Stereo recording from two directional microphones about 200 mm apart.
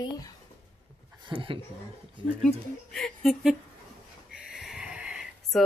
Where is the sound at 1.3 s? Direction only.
25° right (ahead or behind).